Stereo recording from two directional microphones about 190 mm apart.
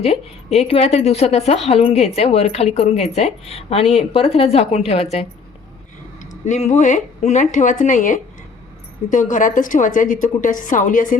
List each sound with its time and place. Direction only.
0.0 s speech: 35° left (ahead or behind)
6.4 s speech: 40° left (ahead or behind)
9.3 s a woman's voice: 45° left (ahead or behind)